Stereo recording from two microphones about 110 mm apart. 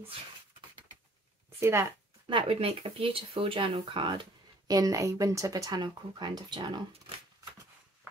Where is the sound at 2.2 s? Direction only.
50° right (ahead or behind).